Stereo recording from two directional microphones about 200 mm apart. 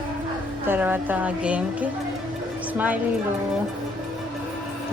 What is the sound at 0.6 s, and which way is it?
Speech, 10° right (ahead or behind).